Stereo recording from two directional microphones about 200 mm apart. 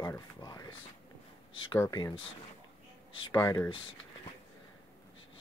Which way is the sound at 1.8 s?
20° left (ahead or behind).